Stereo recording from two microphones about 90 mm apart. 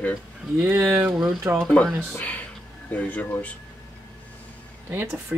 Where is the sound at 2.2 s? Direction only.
15° left (ahead or behind).